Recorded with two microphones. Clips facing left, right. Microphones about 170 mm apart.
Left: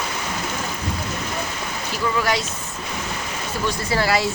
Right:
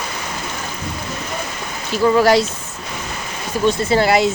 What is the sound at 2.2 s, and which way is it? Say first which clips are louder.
Speech: right 9 dB; 35° right (ahead or behind).